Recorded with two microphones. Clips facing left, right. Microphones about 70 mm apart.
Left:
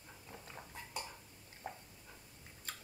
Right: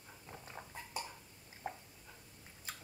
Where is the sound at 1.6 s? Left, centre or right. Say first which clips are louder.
Right 3 dB; centre.